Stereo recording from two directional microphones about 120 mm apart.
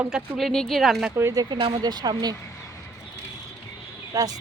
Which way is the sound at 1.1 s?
25° right (ahead or behind).